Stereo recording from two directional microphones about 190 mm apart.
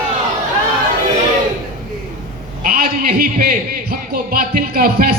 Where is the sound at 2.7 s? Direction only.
50° right (ahead or behind).